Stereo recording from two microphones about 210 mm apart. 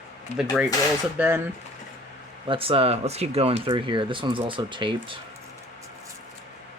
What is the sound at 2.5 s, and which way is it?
Speech, 25° right (ahead or behind).